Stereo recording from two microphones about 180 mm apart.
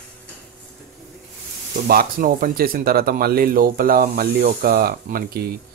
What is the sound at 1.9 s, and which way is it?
Speech, 55° right (ahead or behind).